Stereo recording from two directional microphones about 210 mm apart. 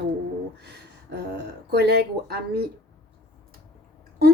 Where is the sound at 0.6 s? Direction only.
50° right (ahead or behind).